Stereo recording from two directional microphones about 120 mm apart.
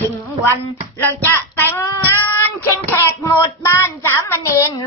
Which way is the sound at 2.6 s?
20° left (ahead or behind).